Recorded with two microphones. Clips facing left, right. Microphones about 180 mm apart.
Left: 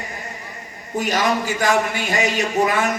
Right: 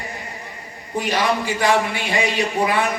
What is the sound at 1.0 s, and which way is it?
A man's voice, 45° left (ahead or behind).